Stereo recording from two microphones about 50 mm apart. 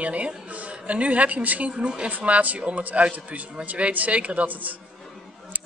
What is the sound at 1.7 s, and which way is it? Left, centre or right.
Speech, centre.